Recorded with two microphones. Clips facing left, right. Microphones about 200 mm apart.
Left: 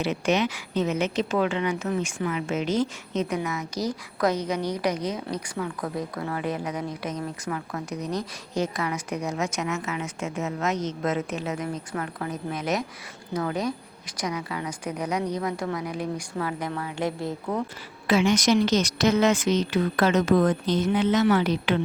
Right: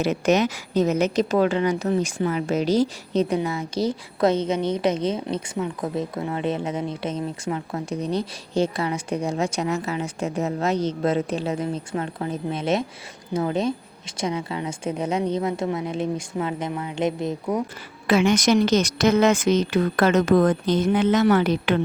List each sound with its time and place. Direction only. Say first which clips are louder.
0.0 s a woman's voice: right 4 dB; 45° right (ahead or behind); by 17.6 s 20° right (ahead or behind)
18.1 s a woman's voice: right 2 dB; 55° right (ahead or behind)